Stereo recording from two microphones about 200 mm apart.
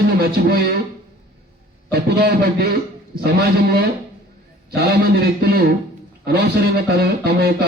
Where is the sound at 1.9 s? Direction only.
55° right (ahead or behind).